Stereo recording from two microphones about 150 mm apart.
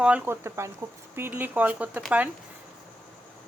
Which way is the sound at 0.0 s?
10° right (ahead or behind).